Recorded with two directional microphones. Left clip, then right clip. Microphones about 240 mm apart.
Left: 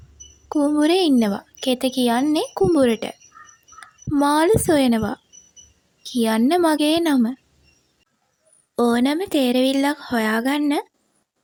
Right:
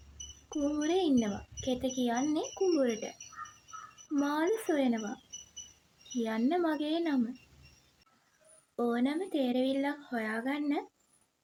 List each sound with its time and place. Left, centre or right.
0.4 s a woman's voice: left
4.1 s a woman's voice: left
8.7 s a woman's voice: left